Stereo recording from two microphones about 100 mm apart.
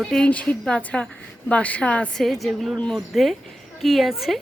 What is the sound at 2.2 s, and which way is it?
A woman's voice, centre (ahead or behind).